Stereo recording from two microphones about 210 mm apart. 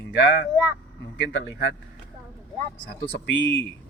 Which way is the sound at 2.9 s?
50° left (ahead or behind).